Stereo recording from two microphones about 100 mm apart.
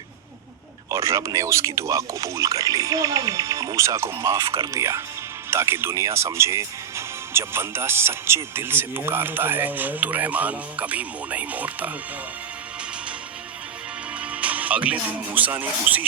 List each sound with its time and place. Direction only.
0.9 s speech: 30° right (ahead or behind)
14.2 s speech: 15° right (ahead or behind)